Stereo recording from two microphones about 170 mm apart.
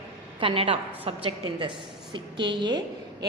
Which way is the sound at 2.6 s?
25° right (ahead or behind).